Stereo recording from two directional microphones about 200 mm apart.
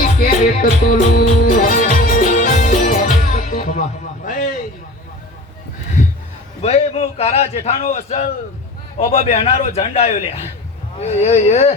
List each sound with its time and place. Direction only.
0.1 s music: 45° left (ahead or behind)
6.6 s a man's voice: 30° left (ahead or behind)